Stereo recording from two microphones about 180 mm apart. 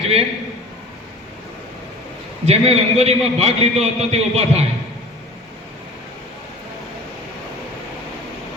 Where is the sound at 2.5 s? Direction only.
35° right (ahead or behind).